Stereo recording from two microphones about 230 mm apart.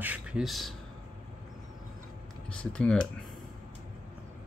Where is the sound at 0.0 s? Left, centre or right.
Centre.